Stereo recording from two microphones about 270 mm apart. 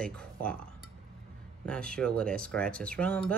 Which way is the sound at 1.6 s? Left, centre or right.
Centre.